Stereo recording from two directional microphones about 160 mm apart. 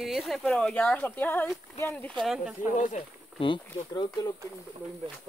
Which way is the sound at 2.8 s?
50° left (ahead or behind).